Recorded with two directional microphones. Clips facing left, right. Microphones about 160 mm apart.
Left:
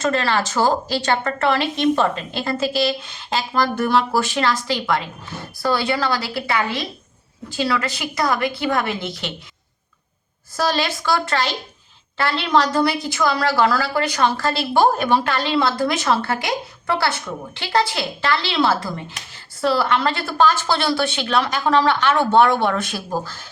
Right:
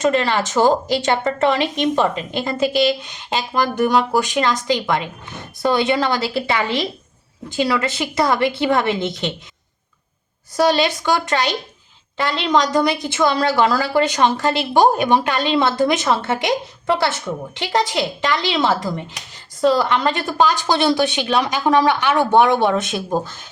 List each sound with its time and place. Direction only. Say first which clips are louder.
0.0 s a woman's voice: right 3 dB; 15° right (ahead or behind)
10.6 s a woman's voice: right 5 dB; 15° right (ahead or behind)